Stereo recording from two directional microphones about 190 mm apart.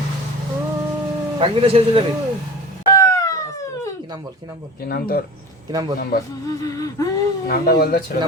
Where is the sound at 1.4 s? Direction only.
30° right (ahead or behind).